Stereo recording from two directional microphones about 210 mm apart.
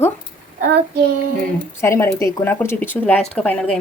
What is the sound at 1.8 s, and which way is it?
Speech, 10° left (ahead or behind).